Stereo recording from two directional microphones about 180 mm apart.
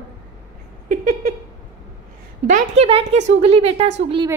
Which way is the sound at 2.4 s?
40° right (ahead or behind).